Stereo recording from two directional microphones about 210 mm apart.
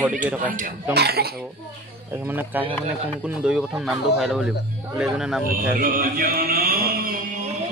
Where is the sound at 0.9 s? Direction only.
50° right (ahead or behind).